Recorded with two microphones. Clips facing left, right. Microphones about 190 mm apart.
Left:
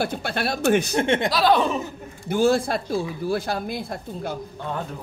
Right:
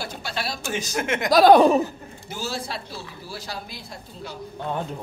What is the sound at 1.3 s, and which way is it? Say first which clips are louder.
Speech: right 11 dB; 45° right (ahead or behind).